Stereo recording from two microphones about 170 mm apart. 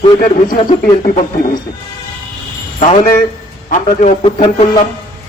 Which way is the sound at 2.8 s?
45° left (ahead or behind).